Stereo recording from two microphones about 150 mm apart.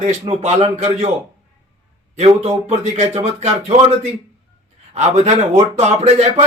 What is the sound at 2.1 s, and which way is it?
Speech, 40° right (ahead or behind).